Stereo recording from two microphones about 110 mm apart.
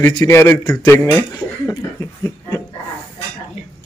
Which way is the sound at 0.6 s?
35° left (ahead or behind).